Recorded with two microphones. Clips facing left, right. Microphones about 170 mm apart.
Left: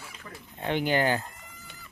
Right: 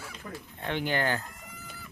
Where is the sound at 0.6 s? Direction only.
15° left (ahead or behind).